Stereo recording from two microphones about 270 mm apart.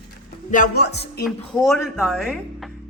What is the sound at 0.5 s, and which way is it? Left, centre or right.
Speech, left.